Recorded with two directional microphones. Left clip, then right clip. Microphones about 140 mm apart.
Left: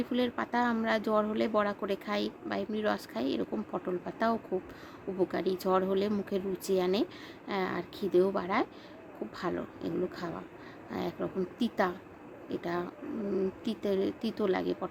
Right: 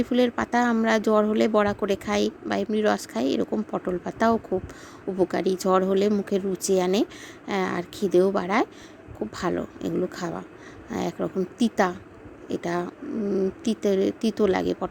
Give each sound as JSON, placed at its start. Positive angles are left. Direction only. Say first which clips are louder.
{"t": 0.0, "sound": "speech", "louder": "right 9 dB", "side_deg": -45}